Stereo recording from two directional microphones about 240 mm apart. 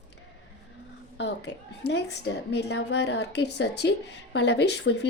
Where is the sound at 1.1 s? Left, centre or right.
Left.